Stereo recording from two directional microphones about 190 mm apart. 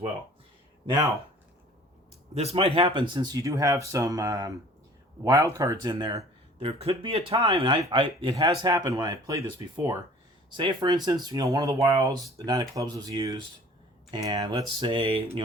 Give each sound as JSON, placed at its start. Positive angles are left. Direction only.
{"t": 2.3, "sound": "speech", "side_deg": -30}